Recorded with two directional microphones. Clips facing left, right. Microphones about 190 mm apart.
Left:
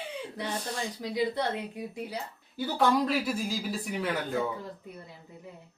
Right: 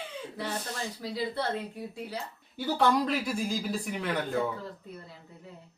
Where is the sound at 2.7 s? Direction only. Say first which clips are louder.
Left 1 dB; centre (ahead or behind).